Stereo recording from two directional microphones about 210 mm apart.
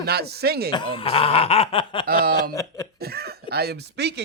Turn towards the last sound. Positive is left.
turn(degrees=-50)  # may be behind; listen again after turning